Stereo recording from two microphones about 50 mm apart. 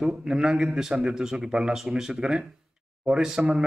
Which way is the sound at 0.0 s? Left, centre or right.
Centre.